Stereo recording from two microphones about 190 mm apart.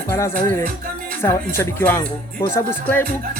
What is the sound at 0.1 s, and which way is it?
Speech, 15° left (ahead or behind).